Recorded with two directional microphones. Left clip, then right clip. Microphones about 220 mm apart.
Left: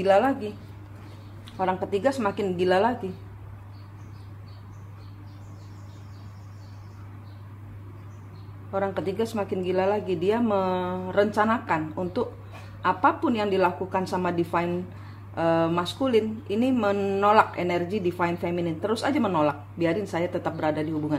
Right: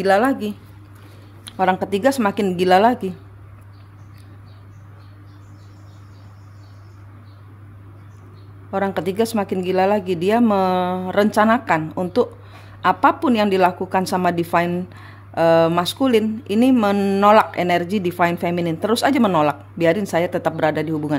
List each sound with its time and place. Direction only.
0.0 s speech: 55° right (ahead or behind)
8.7 s speech: 55° right (ahead or behind)